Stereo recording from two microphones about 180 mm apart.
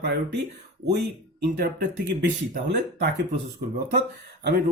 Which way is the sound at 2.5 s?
70° right (ahead or behind).